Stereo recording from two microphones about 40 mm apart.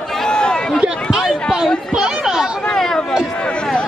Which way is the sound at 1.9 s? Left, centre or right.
Centre.